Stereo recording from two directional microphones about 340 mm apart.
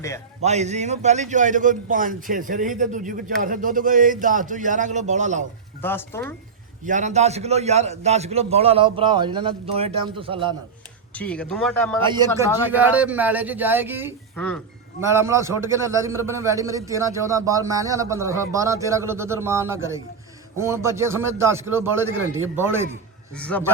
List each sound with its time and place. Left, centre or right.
0.4 s a man's voice: centre
5.8 s speech: centre
6.8 s a man's voice: right
11.1 s a man's voice: centre
12.0 s a man's voice: centre
14.3 s a man's voice: centre
15.0 s a man's voice: centre
23.4 s a man's voice: centre